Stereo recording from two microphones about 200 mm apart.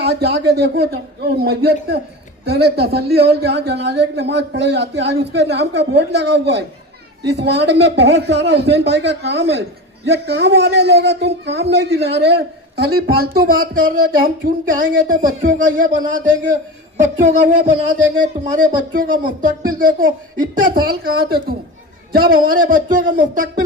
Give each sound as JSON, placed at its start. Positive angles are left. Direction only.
{"t": 0.0, "sound": "a man's voice", "side_deg": -55}
{"t": 17.0, "sound": "a sound", "side_deg": -40}
{"t": 18.2, "sound": "a man's voice", "side_deg": -40}